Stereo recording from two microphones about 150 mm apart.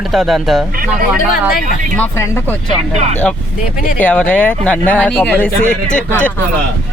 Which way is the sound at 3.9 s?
10° left (ahead or behind).